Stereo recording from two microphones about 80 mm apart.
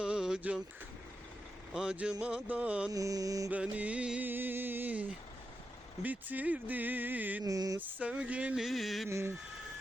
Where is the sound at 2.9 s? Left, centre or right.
Right.